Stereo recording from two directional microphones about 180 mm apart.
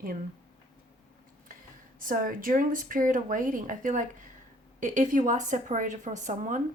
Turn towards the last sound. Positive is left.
turn(degrees=-45)  # may be behind; listen again after turning